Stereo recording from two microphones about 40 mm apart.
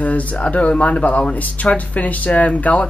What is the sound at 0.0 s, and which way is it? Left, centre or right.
Speech, left.